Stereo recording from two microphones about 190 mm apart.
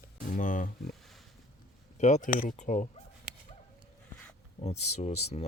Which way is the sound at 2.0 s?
40° left (ahead or behind).